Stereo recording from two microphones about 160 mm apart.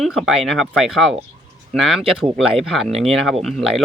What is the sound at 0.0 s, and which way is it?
Speech, centre (ahead or behind).